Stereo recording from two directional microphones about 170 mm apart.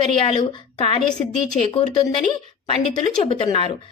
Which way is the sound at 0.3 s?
30° left (ahead or behind).